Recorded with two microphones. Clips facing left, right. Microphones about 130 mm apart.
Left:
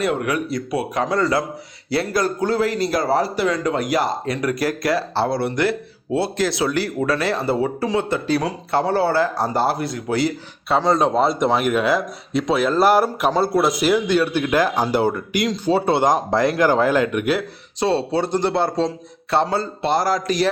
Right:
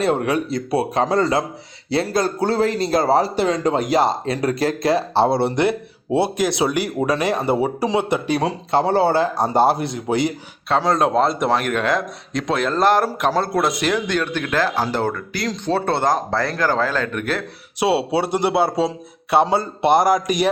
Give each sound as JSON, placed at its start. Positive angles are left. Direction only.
{"t": 0.0, "sound": "a man's voice", "side_deg": -30}
{"t": 10.7, "sound": "speech", "side_deg": 0}
{"t": 15.4, "sound": "speech", "side_deg": 5}
{"t": 17.7, "sound": "a man's voice", "side_deg": -10}